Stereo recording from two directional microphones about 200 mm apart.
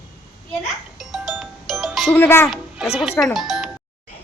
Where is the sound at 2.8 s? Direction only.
Centre (ahead or behind).